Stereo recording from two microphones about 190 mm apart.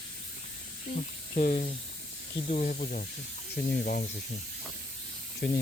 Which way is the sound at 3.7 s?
55° left (ahead or behind).